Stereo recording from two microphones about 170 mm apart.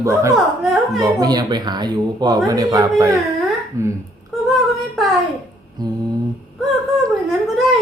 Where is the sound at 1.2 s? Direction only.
25° right (ahead or behind).